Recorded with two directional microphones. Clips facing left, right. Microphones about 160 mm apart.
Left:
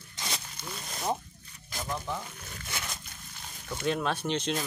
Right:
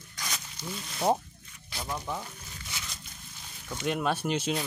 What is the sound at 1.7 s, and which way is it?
Speech, 45° left (ahead or behind).